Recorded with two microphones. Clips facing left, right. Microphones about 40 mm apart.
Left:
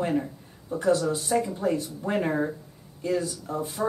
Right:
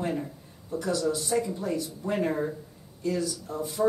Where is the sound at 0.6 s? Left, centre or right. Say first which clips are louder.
Left 6 dB; left.